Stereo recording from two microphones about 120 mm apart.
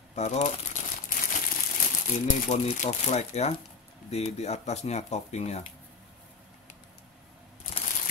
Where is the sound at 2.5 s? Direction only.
75° left (ahead or behind).